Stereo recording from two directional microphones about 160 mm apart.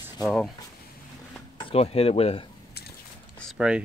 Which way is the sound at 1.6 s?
40° left (ahead or behind).